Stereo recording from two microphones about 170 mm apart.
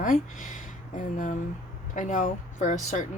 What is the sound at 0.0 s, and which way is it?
Speech, 50° left (ahead or behind).